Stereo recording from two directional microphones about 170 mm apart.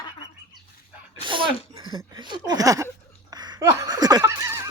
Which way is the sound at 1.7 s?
25° right (ahead or behind).